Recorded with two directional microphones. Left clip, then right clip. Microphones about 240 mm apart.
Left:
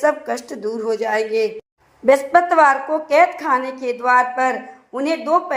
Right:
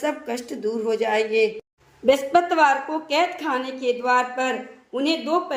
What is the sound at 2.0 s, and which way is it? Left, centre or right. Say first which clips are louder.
A woman's voice: left 4 dB; centre.